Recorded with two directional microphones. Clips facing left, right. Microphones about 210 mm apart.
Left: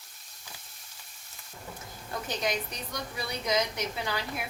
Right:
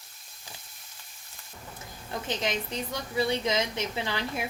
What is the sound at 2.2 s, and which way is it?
A woman's voice, 25° right (ahead or behind).